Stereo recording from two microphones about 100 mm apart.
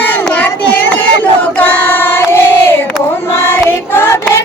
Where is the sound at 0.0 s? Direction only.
20° left (ahead or behind).